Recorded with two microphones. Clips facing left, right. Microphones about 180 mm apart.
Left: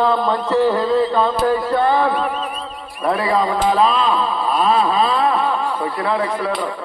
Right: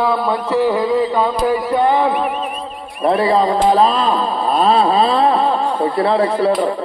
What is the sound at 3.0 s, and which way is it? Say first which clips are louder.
Speech: right 4 dB; 30° right (ahead or behind).